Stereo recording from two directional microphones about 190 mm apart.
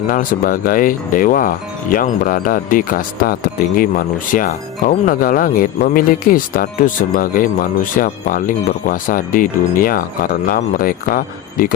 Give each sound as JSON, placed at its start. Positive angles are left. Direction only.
{"t": 0.1, "sound": "speech", "side_deg": 45}